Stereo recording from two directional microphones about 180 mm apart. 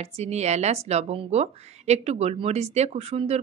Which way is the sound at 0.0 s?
35° right (ahead or behind).